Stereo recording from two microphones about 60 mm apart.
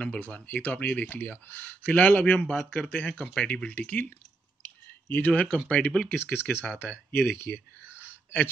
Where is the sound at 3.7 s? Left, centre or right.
Left.